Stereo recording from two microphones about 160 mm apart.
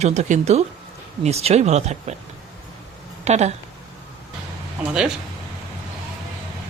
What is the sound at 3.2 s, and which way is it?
Speech, 45° right (ahead or behind).